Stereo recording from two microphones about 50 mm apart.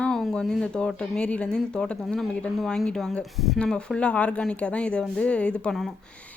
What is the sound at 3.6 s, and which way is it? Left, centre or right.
Speech, centre.